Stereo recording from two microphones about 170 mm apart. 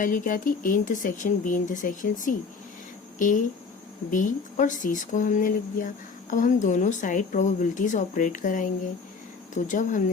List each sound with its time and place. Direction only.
0.0 s a woman's voice: 50° left (ahead or behind)